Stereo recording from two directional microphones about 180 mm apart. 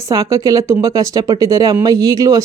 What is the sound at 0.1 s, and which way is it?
Speech, 15° right (ahead or behind).